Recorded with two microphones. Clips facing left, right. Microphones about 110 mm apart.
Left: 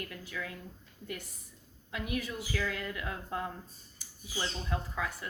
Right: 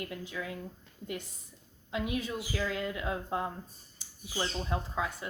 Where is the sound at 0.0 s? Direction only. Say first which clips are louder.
Right 3 dB; 25° right (ahead or behind).